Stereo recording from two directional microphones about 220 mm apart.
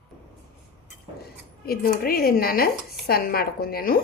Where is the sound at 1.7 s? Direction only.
40° left (ahead or behind).